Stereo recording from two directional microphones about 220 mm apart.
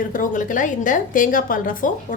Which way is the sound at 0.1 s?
35° left (ahead or behind).